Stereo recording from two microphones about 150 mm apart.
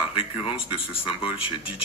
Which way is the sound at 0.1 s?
35° left (ahead or behind).